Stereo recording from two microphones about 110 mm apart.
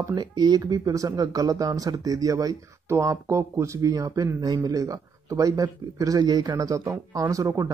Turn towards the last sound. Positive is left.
turn(degrees=-30)  # may be behind; listen again after turning